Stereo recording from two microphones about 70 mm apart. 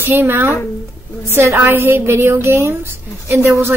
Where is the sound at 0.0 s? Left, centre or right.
Right.